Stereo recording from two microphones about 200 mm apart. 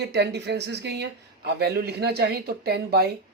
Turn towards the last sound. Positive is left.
turn(degrees=-50)  # may be behind; listen again after turning